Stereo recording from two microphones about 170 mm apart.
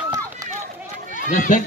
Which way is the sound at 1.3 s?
50° left (ahead or behind).